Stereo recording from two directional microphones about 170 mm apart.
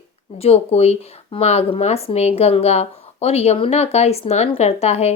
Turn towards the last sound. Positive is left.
turn(degrees=40)  # may be behind; listen again after turning